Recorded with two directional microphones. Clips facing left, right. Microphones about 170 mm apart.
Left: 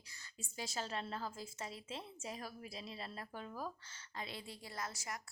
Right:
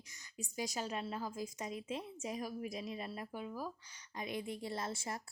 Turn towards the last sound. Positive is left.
turn(degrees=-25)  # may be behind; listen again after turning